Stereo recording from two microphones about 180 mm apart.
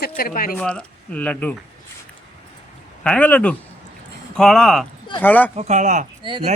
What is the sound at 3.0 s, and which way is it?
A man's voice, 5° left (ahead or behind).